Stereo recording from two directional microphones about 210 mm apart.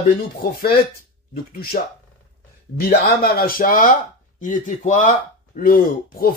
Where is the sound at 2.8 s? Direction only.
45° left (ahead or behind).